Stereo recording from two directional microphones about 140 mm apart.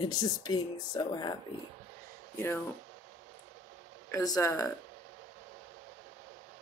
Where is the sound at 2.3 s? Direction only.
20° left (ahead or behind).